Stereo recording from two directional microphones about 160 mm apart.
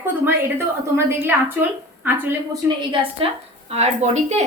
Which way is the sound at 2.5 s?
30° right (ahead or behind).